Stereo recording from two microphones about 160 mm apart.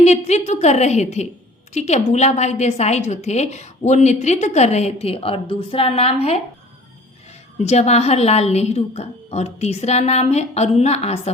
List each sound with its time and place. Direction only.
0.0 s a woman's voice: 45° left (ahead or behind)
7.6 s a woman's voice: 45° left (ahead or behind)